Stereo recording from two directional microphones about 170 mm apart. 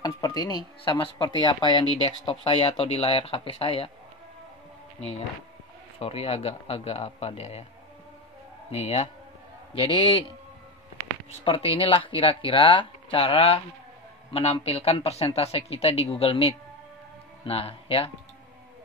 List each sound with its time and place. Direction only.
0.0 s speech: 20° left (ahead or behind)
5.9 s speech: 35° left (ahead or behind)
8.7 s speech: 35° left (ahead or behind)
11.4 s speech: 35° left (ahead or behind)